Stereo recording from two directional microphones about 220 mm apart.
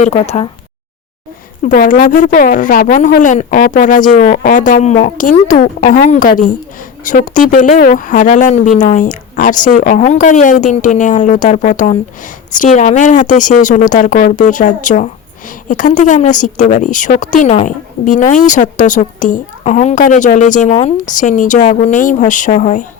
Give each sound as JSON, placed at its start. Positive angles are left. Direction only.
{"t": 0.0, "sound": "speech", "side_deg": 30}
{"t": 1.6, "sound": "speech", "side_deg": 40}